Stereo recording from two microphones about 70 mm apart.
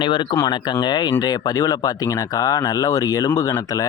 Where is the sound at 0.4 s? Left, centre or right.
Left.